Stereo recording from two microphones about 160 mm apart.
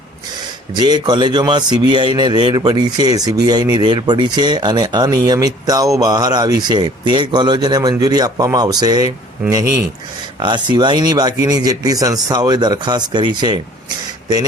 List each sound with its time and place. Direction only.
0.8 s speech: 25° right (ahead or behind)